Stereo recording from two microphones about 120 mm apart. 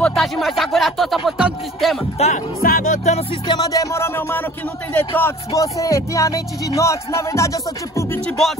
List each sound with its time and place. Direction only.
0.0 s music: centre (ahead or behind)
2.1 s music: 80° left
3.4 s speech: 35° left (ahead or behind); by 5.3 s 15° left (ahead or behind)
5.5 s speech: 30° left (ahead or behind)